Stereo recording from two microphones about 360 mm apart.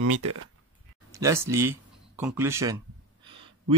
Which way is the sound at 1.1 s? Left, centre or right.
Centre.